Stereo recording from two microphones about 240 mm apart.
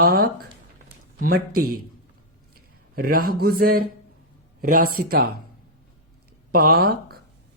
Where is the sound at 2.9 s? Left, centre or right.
Right.